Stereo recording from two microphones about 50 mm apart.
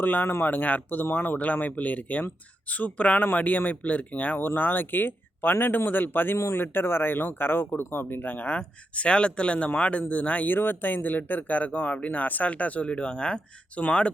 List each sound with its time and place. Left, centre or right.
0.0 s speech: left
4.4 s speech: left
6.3 s speech: left
6.6 s speech: left
8.5 s speech: left